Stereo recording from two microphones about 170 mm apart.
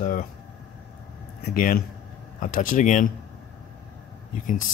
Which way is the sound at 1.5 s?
55° left (ahead or behind).